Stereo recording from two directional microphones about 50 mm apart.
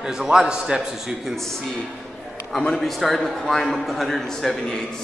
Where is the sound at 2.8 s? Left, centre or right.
Centre.